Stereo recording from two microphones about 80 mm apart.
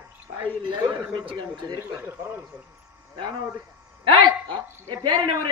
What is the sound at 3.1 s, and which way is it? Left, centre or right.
Speech, right.